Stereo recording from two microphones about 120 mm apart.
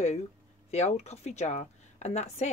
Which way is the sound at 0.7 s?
65° left (ahead or behind).